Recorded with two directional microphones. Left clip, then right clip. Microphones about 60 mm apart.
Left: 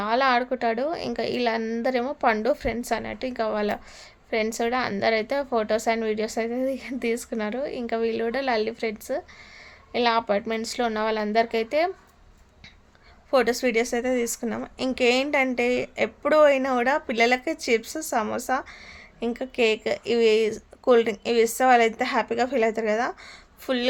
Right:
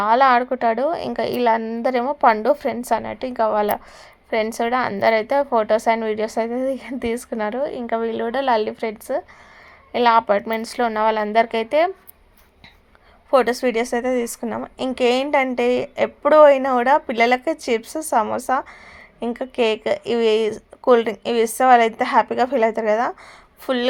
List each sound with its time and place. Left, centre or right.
0.0 s a woman's voice: right
8.3 s a woman's voice: right
13.3 s speech: right